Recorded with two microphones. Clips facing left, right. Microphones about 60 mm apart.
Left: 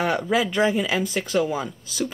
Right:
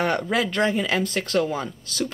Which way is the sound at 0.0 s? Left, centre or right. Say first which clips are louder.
Left 1 dB; centre.